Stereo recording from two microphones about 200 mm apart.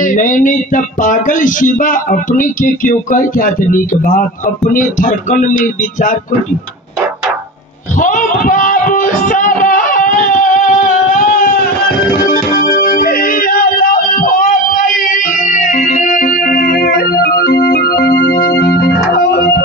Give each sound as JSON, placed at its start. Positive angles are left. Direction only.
{"t": 0.0, "sound": "speech", "side_deg": 40}
{"t": 8.0, "sound": "a sound", "side_deg": 40}
{"t": 12.3, "sound": "music", "side_deg": 45}